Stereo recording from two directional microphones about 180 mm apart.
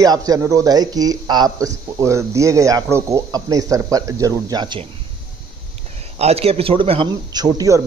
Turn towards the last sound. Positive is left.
turn(degrees=-20)  # may be behind; listen again after turning